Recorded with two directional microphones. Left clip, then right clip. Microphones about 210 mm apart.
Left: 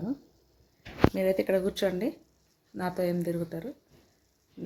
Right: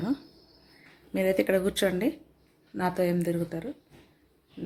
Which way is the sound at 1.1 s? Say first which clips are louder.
Right 1 dB; centre (ahead or behind).